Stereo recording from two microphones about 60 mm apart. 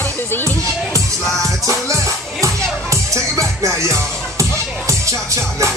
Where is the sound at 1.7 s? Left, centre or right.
Right.